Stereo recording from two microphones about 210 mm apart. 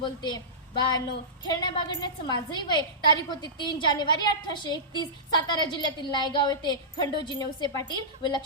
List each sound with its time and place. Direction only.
0.0 s a woman's voice: 20° left (ahead or behind)